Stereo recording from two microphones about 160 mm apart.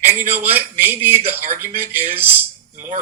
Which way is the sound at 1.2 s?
45° right (ahead or behind).